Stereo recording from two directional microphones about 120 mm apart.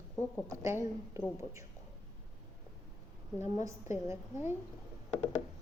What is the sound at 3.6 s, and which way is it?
Speech, 25° right (ahead or behind).